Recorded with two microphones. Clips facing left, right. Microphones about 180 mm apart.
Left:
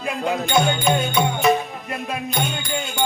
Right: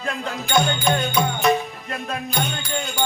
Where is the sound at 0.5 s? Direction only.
5° left (ahead or behind).